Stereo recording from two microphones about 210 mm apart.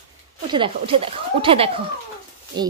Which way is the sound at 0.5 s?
25° right (ahead or behind).